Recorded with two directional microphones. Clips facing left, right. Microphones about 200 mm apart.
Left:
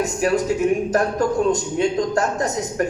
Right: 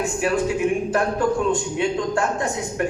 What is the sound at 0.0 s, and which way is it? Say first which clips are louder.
A man's voice: left 2 dB; 40° left (ahead or behind).